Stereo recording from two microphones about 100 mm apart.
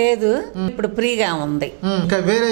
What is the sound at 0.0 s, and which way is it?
Speech, 15° right (ahead or behind).